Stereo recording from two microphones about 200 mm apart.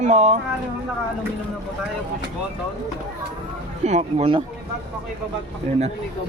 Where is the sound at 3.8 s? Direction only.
35° right (ahead or behind).